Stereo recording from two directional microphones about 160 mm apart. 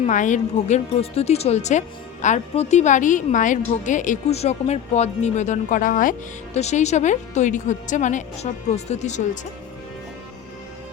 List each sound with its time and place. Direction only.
0.0 s a woman's voice: 50° left (ahead or behind)